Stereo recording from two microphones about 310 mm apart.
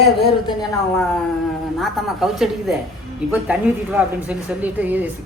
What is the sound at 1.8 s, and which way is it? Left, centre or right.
A woman's voice, centre.